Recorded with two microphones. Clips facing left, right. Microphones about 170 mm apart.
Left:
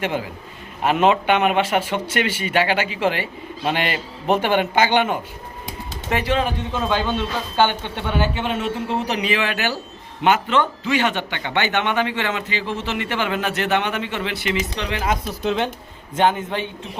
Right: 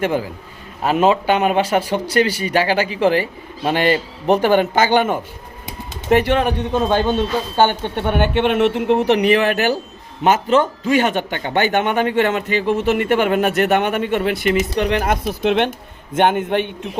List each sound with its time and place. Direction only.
0.0 s a man's voice: 45° right (ahead or behind)
0.9 s speech: 30° right (ahead or behind)
6.1 s speech: 55° right (ahead or behind)
6.8 s a man's voice: 45° right (ahead or behind); by 9.0 s 70° right (ahead or behind)
9.0 s a man's voice: 55° right (ahead or behind)